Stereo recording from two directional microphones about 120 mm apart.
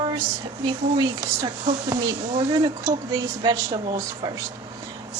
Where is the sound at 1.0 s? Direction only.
35° right (ahead or behind).